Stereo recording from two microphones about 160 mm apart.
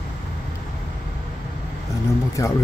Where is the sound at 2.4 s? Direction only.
20° left (ahead or behind).